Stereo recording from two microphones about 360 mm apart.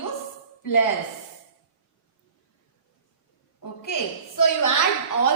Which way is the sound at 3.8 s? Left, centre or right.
Left.